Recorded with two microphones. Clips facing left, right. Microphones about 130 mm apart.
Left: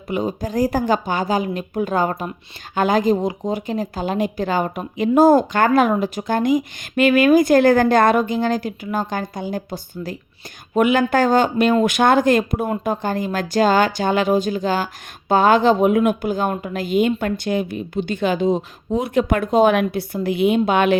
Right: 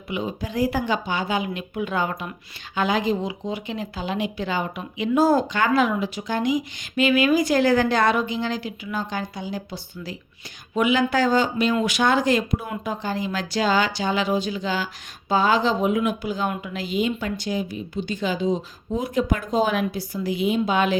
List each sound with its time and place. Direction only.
0.1 s a woman's voice: 45° left (ahead or behind); by 21.0 s 60° left (ahead or behind)